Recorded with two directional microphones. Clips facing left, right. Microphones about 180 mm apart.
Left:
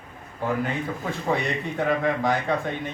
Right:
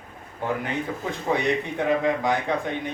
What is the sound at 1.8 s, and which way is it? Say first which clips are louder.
Speech: right 1 dB; 20° right (ahead or behind).